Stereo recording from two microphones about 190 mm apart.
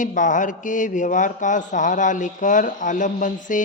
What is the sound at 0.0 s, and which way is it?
Speech, 40° left (ahead or behind).